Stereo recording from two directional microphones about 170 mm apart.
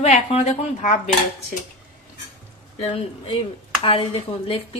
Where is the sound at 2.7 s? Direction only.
35° left (ahead or behind).